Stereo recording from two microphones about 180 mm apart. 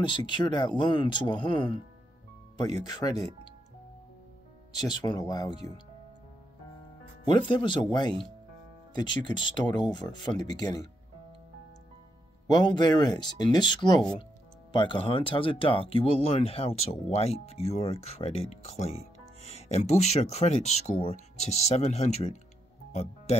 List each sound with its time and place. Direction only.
0.0 s speech: 25° left (ahead or behind)
4.7 s speech: 25° left (ahead or behind)
7.2 s speech: 25° left (ahead or behind)
12.4 s speech: 25° left (ahead or behind)